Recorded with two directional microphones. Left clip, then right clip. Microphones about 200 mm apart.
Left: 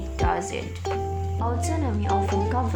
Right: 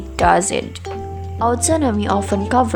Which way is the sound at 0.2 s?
50° right (ahead or behind).